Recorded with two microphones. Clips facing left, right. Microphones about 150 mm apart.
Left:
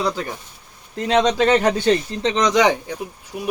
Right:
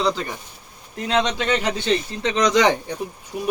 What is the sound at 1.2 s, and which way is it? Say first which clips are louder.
Speech: left 9 dB; 40° left (ahead or behind).